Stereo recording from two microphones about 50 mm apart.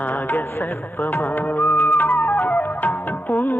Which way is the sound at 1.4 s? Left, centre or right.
Left.